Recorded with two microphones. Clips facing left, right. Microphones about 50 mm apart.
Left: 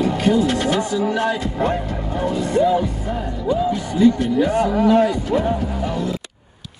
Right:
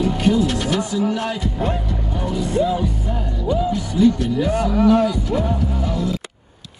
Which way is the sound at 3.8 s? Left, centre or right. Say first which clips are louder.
Left 1 dB; left.